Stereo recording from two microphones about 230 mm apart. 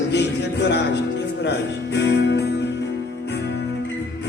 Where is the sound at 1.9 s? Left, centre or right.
Left.